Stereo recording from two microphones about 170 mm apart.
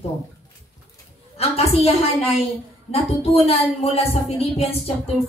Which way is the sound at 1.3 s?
35° left (ahead or behind).